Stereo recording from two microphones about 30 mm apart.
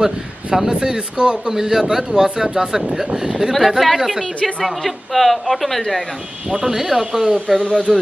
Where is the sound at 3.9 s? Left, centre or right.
Centre.